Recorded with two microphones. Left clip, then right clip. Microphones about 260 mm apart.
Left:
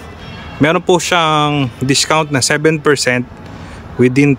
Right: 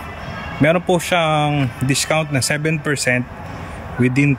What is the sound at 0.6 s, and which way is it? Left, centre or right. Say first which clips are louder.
Speech: left 4 dB; centre.